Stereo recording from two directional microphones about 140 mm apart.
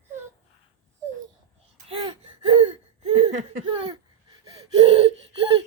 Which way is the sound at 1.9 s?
40° right (ahead or behind).